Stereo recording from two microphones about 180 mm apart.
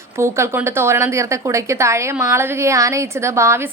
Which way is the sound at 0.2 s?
15° right (ahead or behind).